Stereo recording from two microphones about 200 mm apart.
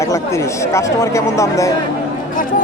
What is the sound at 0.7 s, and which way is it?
Speech, 15° left (ahead or behind).